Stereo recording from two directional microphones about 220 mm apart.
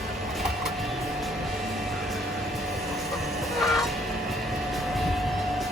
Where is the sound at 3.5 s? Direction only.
Centre (ahead or behind).